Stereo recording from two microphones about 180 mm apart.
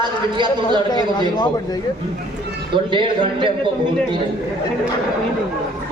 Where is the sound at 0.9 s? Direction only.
25° left (ahead or behind).